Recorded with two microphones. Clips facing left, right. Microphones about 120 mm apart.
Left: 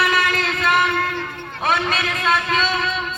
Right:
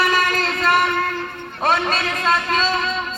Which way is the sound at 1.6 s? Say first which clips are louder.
Right 1 dB; 35° right (ahead or behind).